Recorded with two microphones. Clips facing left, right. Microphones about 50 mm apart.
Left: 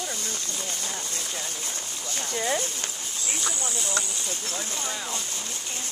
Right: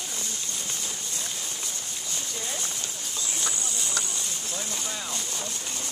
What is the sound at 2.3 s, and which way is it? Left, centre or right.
Speech, left.